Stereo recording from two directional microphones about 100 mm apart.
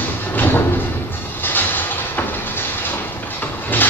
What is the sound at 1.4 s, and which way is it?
Vehicle, 20° left (ahead or behind).